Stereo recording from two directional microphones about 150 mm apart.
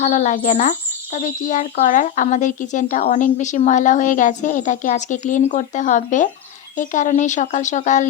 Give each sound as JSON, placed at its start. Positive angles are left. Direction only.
{"t": 0.0, "sound": "speech", "side_deg": 55}